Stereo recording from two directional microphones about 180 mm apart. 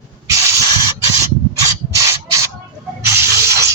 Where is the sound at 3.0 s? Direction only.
15° right (ahead or behind).